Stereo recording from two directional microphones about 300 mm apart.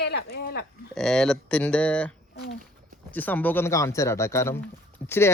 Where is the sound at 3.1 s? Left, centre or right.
Centre.